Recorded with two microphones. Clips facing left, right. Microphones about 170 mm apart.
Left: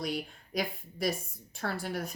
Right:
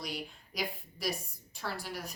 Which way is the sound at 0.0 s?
55° left (ahead or behind).